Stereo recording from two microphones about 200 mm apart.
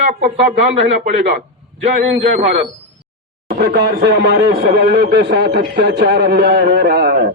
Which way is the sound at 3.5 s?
50° right (ahead or behind).